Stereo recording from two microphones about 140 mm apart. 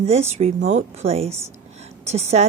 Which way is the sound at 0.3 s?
50° right (ahead or behind).